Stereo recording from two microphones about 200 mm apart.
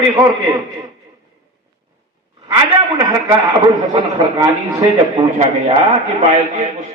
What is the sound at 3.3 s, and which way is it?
A man's voice, 15° right (ahead or behind).